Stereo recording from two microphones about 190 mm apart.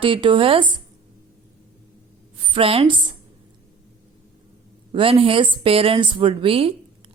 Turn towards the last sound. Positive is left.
turn(degrees=-30)  # may be behind; listen again after turning